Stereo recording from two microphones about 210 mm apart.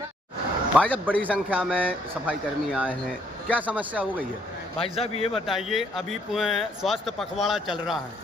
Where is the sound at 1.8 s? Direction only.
5° right (ahead or behind).